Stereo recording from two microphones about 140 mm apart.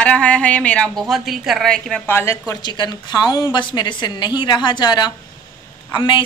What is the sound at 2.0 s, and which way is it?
Speech, 20° left (ahead or behind).